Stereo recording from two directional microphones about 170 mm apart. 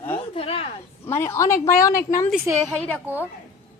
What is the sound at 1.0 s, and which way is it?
A woman's voice, 15° left (ahead or behind).